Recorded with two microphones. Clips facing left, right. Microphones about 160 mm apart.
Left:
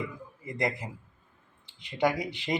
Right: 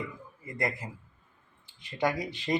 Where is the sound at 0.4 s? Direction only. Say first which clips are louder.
Left 2 dB; 15° left (ahead or behind).